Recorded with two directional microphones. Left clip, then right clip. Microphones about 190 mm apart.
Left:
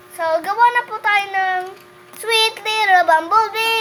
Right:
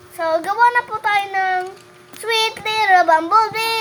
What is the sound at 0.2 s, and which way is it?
Child singing, 10° left (ahead or behind).